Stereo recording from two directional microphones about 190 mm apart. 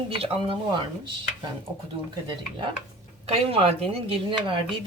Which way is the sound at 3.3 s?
30° right (ahead or behind).